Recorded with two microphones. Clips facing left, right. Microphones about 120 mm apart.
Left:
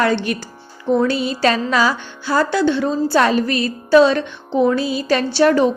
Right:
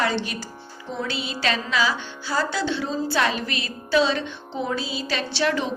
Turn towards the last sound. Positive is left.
turn(degrees=45)  # may be behind; listen again after turning